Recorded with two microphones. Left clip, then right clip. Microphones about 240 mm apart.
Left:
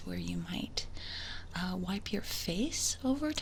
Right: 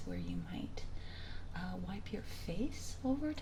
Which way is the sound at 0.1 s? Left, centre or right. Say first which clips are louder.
Left 6 dB; left.